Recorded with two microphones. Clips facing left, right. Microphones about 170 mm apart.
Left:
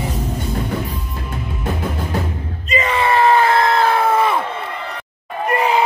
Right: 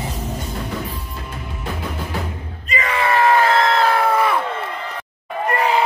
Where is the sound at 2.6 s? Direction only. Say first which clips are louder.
Left 3 dB; 25° left (ahead or behind).